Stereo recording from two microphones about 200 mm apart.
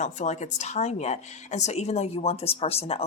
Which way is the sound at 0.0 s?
35° left (ahead or behind).